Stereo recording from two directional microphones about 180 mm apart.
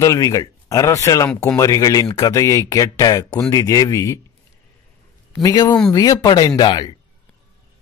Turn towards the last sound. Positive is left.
turn(degrees=25)  # may be behind; listen again after turning